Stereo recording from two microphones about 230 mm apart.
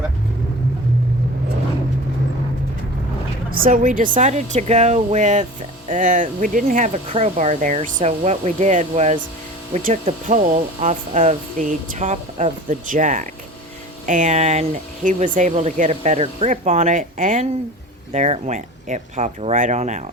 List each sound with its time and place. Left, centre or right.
3.5 s speech: right